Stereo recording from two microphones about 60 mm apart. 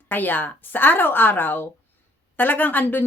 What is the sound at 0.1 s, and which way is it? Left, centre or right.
A woman's voice, left.